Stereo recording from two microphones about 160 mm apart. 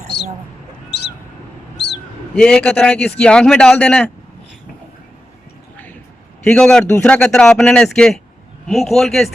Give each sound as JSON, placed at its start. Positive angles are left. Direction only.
{"t": 2.3, "sound": "speech", "side_deg": 5}
{"t": 6.4, "sound": "speech", "side_deg": 5}